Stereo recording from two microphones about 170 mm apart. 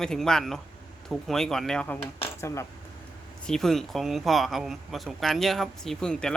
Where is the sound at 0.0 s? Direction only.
5° left (ahead or behind).